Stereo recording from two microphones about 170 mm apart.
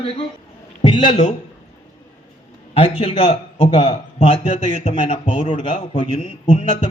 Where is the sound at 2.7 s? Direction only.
30° left (ahead or behind).